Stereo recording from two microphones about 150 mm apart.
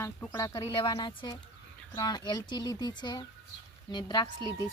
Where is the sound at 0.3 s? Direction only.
25° left (ahead or behind).